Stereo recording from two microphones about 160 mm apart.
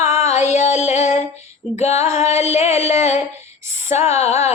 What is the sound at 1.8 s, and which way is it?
Mantra, 45° left (ahead or behind).